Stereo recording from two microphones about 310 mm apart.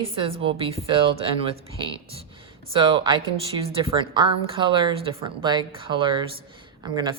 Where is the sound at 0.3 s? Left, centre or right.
Centre.